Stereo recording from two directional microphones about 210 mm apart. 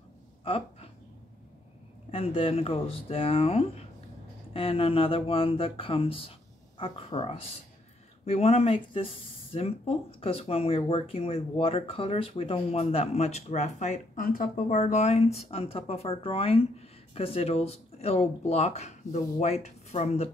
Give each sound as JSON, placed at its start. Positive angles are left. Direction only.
{"t": 0.5, "sound": "speech", "side_deg": 25}
{"t": 2.0, "sound": "speech", "side_deg": 25}